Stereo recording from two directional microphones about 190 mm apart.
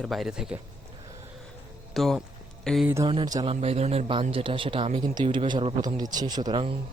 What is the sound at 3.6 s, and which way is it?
A man's voice, 30° right (ahead or behind).